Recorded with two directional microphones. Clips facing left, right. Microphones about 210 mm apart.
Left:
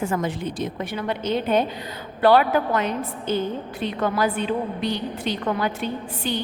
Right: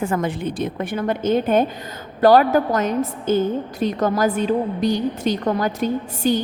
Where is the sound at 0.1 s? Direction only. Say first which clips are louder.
Right 3 dB; 55° right (ahead or behind).